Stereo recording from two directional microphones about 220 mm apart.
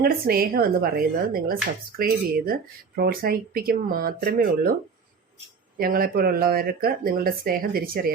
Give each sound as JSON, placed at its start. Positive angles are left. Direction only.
{"t": 0.0, "sound": "a woman's voice", "side_deg": -40}
{"t": 5.7, "sound": "speech", "side_deg": -40}